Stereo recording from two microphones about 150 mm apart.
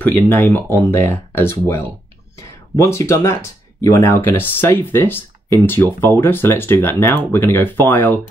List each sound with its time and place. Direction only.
0.0 s speech: 15° left (ahead or behind)